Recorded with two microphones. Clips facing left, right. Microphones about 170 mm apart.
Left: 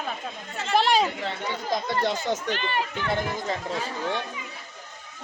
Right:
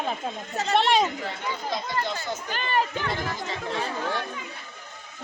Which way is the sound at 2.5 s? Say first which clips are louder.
Right 2 dB; 40° right (ahead or behind).